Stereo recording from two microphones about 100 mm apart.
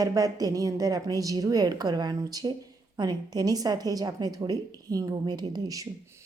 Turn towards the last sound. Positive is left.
turn(degrees=-35)  # may be behind; listen again after turning